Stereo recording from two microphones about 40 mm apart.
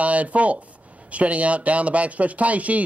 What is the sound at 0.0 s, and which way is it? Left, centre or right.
Speech, right.